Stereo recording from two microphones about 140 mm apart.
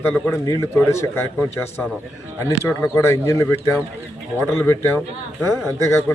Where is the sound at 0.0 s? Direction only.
20° left (ahead or behind).